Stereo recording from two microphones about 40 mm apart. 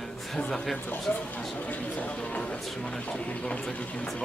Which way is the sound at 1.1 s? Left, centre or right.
Left.